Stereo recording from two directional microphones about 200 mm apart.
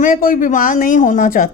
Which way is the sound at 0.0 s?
40° left (ahead or behind).